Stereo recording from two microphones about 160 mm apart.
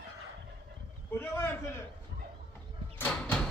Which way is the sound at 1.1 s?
15° left (ahead or behind).